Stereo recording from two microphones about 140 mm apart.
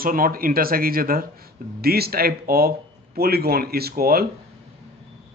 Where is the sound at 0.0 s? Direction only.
90° right.